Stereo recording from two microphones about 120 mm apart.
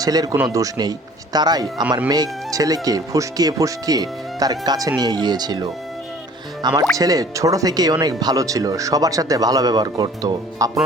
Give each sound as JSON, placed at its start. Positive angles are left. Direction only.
{"t": 0.0, "sound": "speech", "side_deg": -30}